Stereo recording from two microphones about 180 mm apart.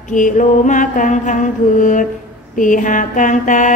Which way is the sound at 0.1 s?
45° left (ahead or behind).